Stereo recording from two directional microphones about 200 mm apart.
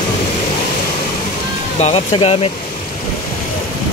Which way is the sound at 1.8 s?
30° left (ahead or behind).